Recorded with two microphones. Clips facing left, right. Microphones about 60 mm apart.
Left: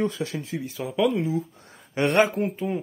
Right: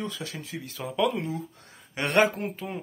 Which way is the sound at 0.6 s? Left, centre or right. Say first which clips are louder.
Left 2 dB; centre.